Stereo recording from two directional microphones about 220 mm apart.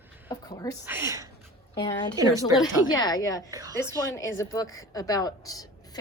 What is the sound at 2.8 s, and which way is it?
Speech, 20° left (ahead or behind).